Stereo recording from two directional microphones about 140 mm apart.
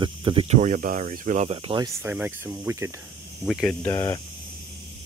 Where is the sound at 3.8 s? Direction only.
25° left (ahead or behind).